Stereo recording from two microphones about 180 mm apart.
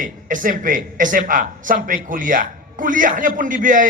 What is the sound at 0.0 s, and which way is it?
A man's voice, 45° right (ahead or behind).